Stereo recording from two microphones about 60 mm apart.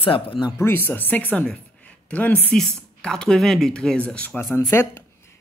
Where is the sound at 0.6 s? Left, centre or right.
Left.